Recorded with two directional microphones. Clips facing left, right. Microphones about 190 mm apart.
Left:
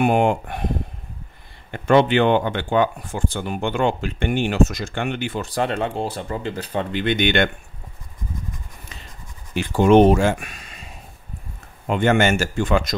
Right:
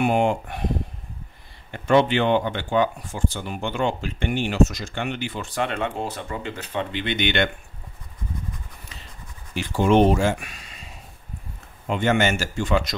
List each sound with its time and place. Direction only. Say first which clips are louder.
0.0 s speech: left 3 dB; 55° left (ahead or behind)
1.7 s speech: left 2 dB; 55° left (ahead or behind)
9.6 s speech: left 4 dB; 55° left (ahead or behind)
11.9 s speech: left 3 dB; 50° left (ahead or behind)